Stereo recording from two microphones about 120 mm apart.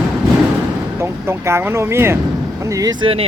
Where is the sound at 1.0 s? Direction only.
20° right (ahead or behind).